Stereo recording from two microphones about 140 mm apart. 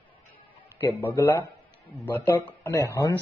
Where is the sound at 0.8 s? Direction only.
15° left (ahead or behind).